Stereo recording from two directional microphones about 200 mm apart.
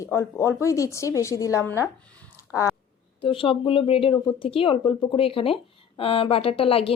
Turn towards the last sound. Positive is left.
turn(degrees=30)  # may be behind; listen again after turning